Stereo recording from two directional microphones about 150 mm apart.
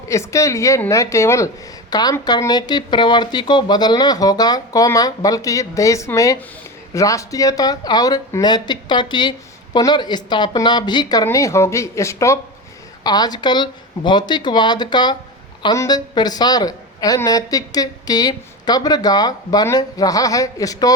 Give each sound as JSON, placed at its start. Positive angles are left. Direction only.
{"t": 0.1, "sound": "a woman's voice", "side_deg": 20}